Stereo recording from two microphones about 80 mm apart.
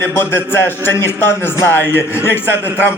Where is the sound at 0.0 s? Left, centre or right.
Left.